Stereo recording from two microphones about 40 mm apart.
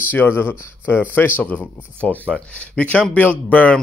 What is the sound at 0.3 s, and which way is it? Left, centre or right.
Speech, left.